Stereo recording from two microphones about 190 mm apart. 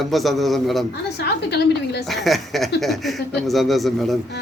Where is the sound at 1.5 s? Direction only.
60° left (ahead or behind).